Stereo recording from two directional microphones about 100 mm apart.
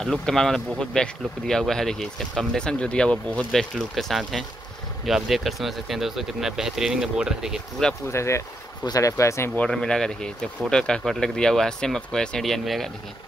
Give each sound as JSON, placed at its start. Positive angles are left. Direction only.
{"t": 0.0, "sound": "speech", "side_deg": 5}
{"t": 8.1, "sound": "speech", "side_deg": 30}
{"t": 9.6, "sound": "speech", "side_deg": 10}